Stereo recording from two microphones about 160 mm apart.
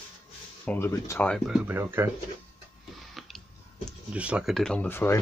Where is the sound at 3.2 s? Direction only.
Centre (ahead or behind).